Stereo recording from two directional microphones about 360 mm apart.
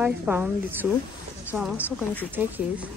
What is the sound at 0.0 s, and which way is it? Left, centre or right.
Speech, centre.